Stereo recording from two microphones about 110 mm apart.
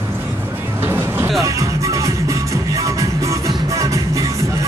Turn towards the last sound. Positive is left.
turn(degrees=-30)  # may be behind; listen again after turning